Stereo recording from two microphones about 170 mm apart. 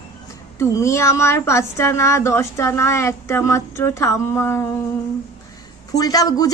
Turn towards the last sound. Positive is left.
turn(degrees=20)  # may be behind; listen again after turning